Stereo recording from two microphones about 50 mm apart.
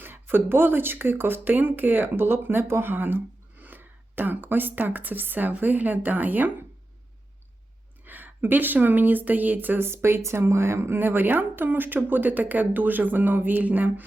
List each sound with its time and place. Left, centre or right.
0.0 s speech: right
8.0 s speech: right
9.8 s a woman's voice: right